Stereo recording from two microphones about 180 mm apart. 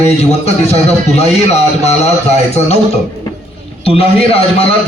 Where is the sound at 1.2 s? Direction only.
40° left (ahead or behind).